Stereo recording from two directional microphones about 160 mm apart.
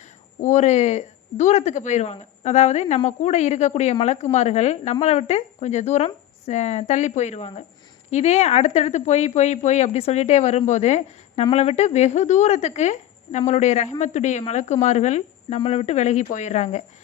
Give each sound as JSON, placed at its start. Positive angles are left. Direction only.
{"t": 0.4, "sound": "speech", "side_deg": 45}